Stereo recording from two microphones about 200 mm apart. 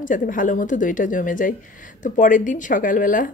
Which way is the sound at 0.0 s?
40° left (ahead or behind).